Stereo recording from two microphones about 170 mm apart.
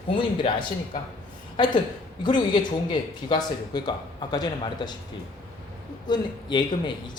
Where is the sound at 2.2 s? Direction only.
25° left (ahead or behind).